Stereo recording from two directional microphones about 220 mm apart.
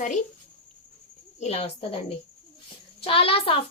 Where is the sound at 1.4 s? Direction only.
30° left (ahead or behind).